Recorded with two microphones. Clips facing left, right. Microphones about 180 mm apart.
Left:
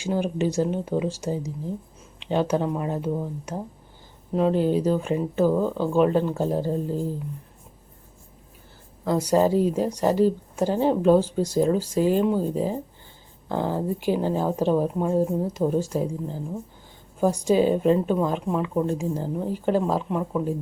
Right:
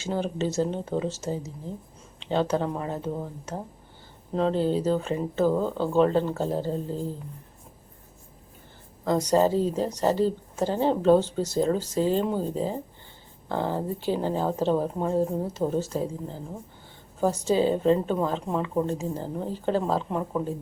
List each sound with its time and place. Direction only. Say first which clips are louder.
0.0 s a woman's voice: left 3 dB; 15° left (ahead or behind)
9.0 s a woman's voice: left 1 dB; 10° left (ahead or behind)
20.1 s speech: left 2 dB; centre (ahead or behind)